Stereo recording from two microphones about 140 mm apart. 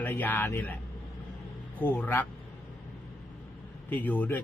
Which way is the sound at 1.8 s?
15° left (ahead or behind).